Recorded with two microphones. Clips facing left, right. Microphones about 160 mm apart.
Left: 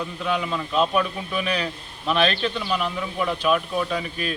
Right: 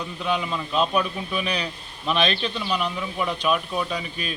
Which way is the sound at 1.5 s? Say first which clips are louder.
Left 2 dB; 15° right (ahead or behind).